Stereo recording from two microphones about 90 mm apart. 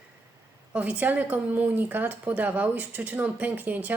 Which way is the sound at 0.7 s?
15° right (ahead or behind).